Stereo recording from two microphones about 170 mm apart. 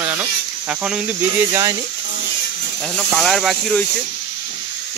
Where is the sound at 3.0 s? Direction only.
Centre (ahead or behind).